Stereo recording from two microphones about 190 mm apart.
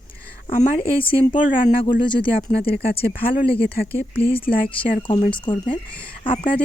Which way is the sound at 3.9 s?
30° left (ahead or behind).